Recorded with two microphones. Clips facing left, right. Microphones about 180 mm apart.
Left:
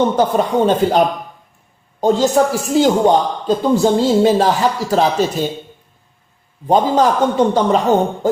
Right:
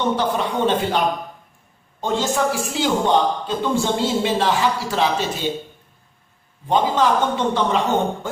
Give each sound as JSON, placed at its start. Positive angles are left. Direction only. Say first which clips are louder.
{"t": 0.2, "sound": "a man's voice", "louder": "left 6 dB", "side_deg": 45}
{"t": 6.7, "sound": "a man's voice", "louder": "left 5 dB", "side_deg": 40}